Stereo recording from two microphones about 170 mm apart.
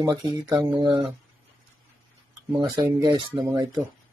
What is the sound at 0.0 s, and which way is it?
Speech, 25° right (ahead or behind).